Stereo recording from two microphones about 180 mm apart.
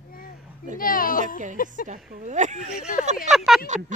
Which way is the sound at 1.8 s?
40° right (ahead or behind).